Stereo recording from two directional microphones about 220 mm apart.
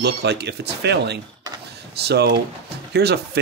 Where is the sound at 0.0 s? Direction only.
50° right (ahead or behind).